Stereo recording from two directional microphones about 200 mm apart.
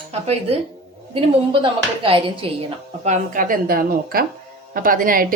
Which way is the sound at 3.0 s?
40° right (ahead or behind).